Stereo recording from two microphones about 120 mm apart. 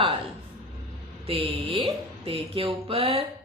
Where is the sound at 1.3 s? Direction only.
50° right (ahead or behind).